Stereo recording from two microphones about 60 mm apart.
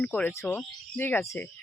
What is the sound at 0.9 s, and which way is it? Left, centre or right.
Speech, left.